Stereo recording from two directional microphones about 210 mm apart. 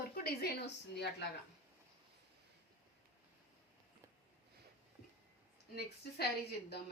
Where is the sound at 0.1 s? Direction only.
45° left (ahead or behind).